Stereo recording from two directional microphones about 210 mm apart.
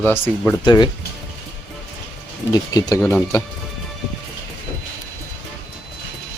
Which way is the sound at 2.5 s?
20° left (ahead or behind).